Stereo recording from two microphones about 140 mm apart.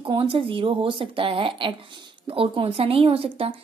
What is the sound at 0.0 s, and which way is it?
Speech, 40° right (ahead or behind).